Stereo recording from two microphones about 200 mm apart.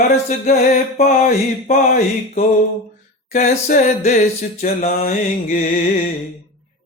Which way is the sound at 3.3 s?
35° left (ahead or behind).